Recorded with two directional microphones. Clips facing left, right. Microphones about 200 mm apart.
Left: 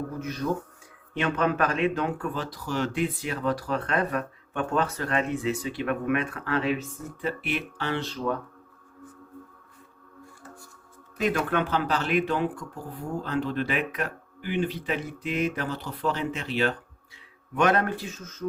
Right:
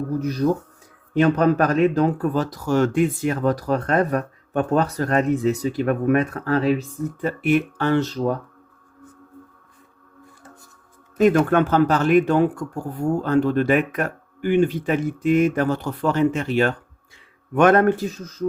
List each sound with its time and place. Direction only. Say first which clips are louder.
0.2 s speech: right 8 dB; 35° right (ahead or behind)
11.2 s speech: right 9 dB; 45° right (ahead or behind)